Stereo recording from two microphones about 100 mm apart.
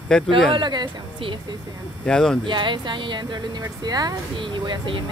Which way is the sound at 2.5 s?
50° right (ahead or behind).